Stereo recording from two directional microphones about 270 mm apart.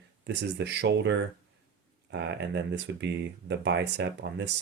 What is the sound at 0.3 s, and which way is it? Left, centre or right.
Speech, right.